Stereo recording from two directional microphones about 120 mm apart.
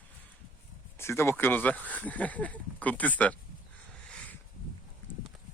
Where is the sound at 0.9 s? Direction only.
20° left (ahead or behind).